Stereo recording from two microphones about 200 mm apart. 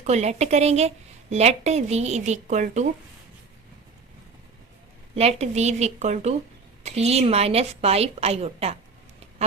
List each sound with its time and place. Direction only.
0.0 s a woman's voice: 35° right (ahead or behind)
5.1 s a woman's voice: 30° right (ahead or behind)